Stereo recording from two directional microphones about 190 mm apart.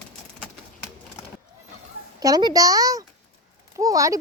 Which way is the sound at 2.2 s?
20° right (ahead or behind).